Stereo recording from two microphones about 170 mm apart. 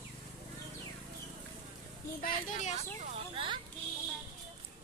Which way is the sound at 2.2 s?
50° left (ahead or behind).